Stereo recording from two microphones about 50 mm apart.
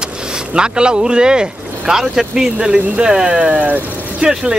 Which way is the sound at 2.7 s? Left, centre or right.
Right.